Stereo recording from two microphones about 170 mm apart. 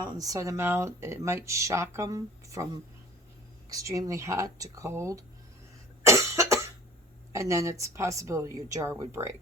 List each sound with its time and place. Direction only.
0.1 s speech: 20° right (ahead or behind)
3.7 s speech: 20° right (ahead or behind)
6.1 s cough: 20° right (ahead or behind)
7.3 s speech: 20° right (ahead or behind)